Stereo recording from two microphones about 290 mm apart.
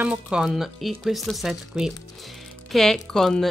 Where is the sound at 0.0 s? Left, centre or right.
Centre.